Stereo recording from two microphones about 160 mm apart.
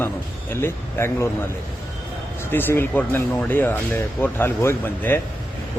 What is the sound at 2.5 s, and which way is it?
Speech, 15° left (ahead or behind).